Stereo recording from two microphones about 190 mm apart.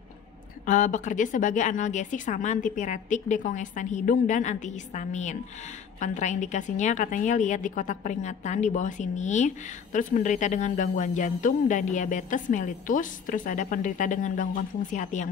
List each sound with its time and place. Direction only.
0.7 s a woman's voice: 40° left (ahead or behind)